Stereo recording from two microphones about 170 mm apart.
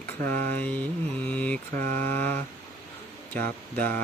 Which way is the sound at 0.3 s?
10° left (ahead or behind).